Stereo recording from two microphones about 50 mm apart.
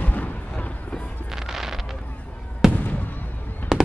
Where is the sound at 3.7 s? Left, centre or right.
Centre.